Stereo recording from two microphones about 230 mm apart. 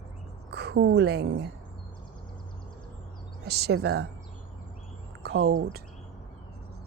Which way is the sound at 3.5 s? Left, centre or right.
Right.